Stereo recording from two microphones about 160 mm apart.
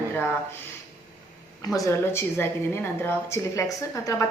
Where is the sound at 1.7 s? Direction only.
15° left (ahead or behind).